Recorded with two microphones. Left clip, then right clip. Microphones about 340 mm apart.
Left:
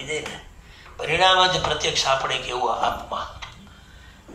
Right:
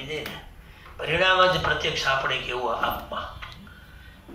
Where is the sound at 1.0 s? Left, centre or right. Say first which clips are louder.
Left 3 dB; centre.